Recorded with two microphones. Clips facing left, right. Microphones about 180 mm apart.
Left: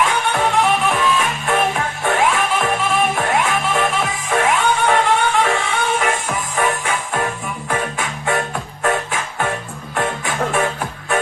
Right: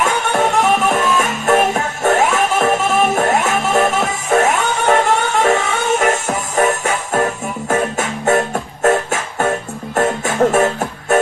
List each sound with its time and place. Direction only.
0.0 s music: 45° right (ahead or behind)